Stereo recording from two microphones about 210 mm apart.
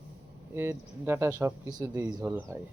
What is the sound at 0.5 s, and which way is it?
Speech, 10° right (ahead or behind).